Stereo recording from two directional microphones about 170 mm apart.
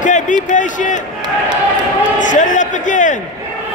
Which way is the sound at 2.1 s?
45° left (ahead or behind).